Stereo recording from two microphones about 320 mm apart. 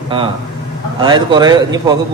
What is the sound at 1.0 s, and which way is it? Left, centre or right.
Speech, centre.